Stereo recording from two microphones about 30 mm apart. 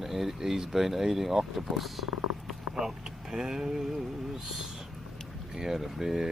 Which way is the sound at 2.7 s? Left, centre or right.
Centre.